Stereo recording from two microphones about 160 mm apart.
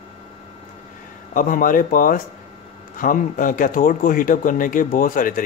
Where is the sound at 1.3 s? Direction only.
55° left (ahead or behind).